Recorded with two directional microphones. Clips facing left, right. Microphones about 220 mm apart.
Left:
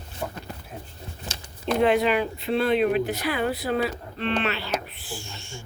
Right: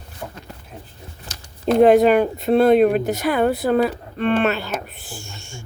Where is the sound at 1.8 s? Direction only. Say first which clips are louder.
Right 9 dB; 45° right (ahead or behind).